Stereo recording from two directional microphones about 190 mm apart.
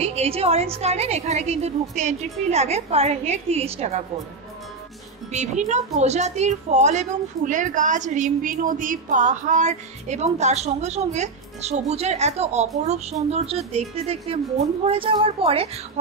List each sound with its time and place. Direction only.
0.0 s a woman's voice: 35° right (ahead or behind)
5.3 s a woman's voice: 35° right (ahead or behind)